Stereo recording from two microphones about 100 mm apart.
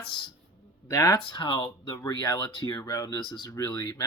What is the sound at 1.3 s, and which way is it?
Mantra, 55° left (ahead or behind).